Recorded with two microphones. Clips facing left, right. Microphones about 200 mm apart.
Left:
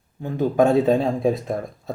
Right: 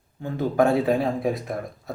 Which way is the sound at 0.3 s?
20° left (ahead or behind).